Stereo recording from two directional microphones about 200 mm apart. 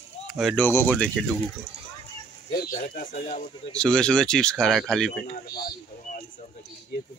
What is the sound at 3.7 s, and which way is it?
Speech, 5° left (ahead or behind).